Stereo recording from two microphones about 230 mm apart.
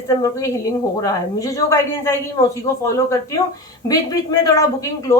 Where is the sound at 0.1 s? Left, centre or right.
Centre.